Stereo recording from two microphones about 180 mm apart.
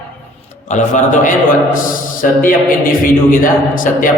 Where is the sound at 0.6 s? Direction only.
45° left (ahead or behind).